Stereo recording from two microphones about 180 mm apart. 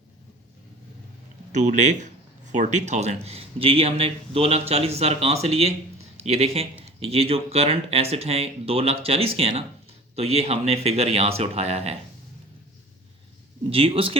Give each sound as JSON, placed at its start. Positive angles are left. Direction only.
{"t": 1.5, "sound": "speech", "side_deg": -40}
{"t": 13.7, "sound": "speech", "side_deg": -30}